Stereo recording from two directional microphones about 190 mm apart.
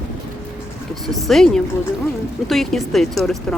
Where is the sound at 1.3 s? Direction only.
Centre (ahead or behind).